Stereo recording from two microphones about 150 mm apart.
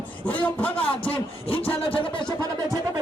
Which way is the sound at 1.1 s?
35° left (ahead or behind).